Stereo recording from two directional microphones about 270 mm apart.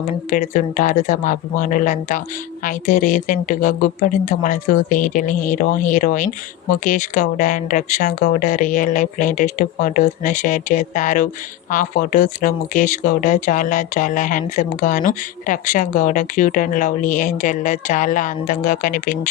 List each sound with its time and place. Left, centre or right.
0.3 s speech: left